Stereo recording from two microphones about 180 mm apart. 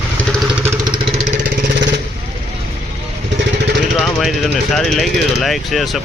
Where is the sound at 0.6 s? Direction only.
15° right (ahead or behind).